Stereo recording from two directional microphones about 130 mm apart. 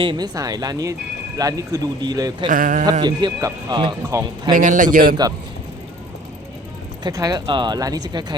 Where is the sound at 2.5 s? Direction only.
90° right.